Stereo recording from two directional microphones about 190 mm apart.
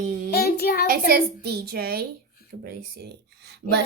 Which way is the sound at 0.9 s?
55° right (ahead or behind).